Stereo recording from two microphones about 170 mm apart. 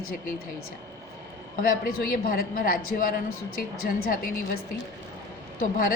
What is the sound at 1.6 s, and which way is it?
A woman's voice, 60° left (ahead or behind).